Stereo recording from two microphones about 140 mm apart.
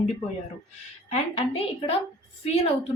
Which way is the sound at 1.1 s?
45° left (ahead or behind).